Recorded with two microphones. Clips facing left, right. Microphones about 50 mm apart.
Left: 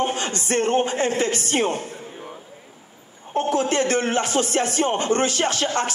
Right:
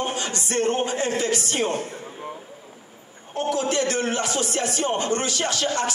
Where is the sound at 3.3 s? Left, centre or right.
Left.